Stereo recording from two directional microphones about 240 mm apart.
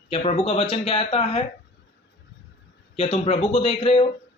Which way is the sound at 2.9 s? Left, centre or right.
Left.